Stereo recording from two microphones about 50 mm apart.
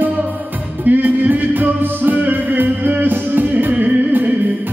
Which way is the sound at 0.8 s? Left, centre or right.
Right.